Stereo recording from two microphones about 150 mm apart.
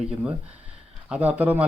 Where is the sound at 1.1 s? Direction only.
10° right (ahead or behind).